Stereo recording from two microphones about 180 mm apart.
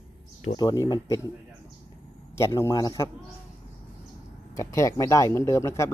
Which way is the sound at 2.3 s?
15° left (ahead or behind).